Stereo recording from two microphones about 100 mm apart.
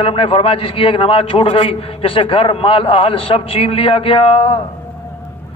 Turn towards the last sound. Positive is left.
turn(degrees=65)  # may be behind; listen again after turning